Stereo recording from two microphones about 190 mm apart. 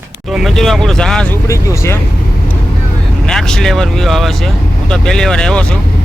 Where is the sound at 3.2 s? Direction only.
5° left (ahead or behind).